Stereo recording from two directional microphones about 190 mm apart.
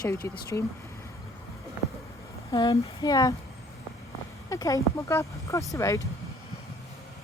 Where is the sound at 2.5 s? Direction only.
20° left (ahead or behind).